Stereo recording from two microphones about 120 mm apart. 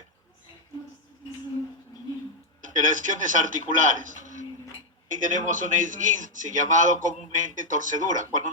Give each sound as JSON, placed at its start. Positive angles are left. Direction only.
{"t": 2.6, "sound": "a man's voice", "side_deg": -90}